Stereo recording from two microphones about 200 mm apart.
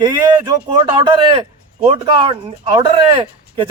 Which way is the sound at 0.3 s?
20° right (ahead or behind).